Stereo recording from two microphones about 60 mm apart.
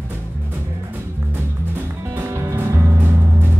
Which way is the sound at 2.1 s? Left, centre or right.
Right.